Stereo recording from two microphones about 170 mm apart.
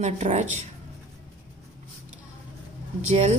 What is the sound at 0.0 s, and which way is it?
Speech, 40° right (ahead or behind).